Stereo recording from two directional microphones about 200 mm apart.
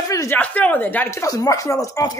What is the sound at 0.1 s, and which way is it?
Speech, 15° left (ahead or behind).